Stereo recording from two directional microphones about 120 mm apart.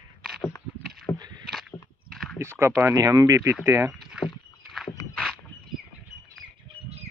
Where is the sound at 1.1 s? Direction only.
35° right (ahead or behind).